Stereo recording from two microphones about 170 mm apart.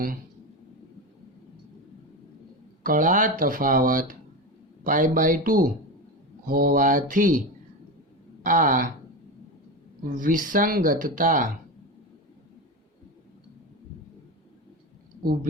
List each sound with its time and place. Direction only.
2.8 s speech: 55° right (ahead or behind)
8.4 s speech: 50° right (ahead or behind)
10.2 s speech: 55° right (ahead or behind)